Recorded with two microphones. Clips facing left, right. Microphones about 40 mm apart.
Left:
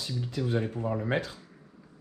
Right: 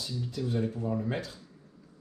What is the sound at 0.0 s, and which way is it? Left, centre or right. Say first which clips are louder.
Speech: left 2 dB; left.